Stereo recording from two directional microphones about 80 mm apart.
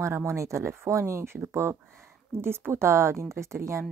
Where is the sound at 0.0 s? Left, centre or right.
Right.